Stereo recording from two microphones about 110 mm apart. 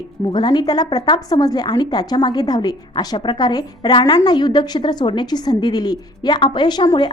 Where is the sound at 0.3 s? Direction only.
40° left (ahead or behind).